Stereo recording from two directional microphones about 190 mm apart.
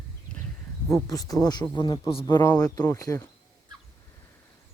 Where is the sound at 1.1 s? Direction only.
20° left (ahead or behind).